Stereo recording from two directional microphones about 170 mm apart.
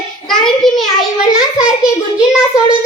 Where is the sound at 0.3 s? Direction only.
Centre (ahead or behind).